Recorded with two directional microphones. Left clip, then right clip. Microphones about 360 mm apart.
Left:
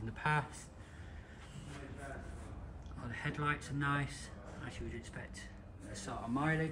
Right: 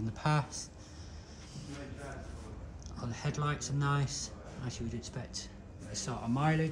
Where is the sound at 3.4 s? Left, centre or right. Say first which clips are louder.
Right 1 dB; centre.